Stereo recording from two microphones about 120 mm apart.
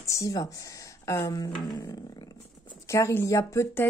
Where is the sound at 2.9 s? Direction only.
20° left (ahead or behind).